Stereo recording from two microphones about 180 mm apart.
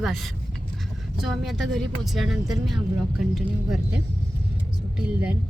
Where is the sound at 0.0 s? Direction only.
Centre (ahead or behind).